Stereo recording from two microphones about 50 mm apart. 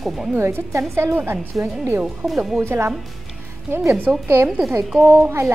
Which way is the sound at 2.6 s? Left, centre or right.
Right.